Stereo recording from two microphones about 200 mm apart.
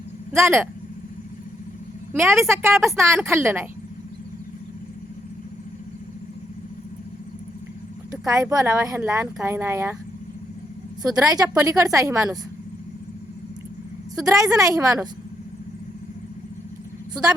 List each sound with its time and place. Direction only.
0.3 s speech: 10° right (ahead or behind)
2.1 s speech: 10° right (ahead or behind)
8.3 s speech: 15° right (ahead or behind)
11.2 s speech: 15° right (ahead or behind)
14.2 s speech: 15° right (ahead or behind)